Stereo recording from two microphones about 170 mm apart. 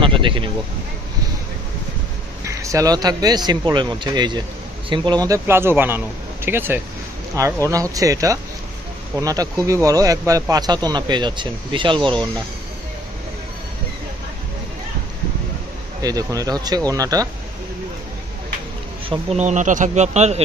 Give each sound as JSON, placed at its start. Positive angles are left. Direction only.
{"t": 0.0, "sound": "a sound", "side_deg": -30}
{"t": 2.4, "sound": "speech", "side_deg": -20}
{"t": 16.0, "sound": "speech", "side_deg": -20}
{"t": 19.0, "sound": "speech", "side_deg": -40}